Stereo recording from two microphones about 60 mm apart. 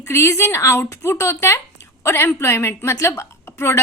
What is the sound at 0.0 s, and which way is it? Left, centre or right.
A woman's voice, left.